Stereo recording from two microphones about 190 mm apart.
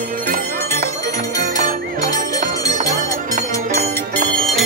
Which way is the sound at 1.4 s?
45° right (ahead or behind).